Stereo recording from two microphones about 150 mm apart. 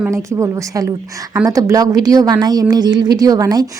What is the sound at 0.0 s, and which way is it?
Speech, 20° right (ahead or behind).